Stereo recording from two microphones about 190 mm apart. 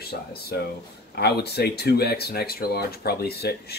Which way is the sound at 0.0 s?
55° left (ahead or behind).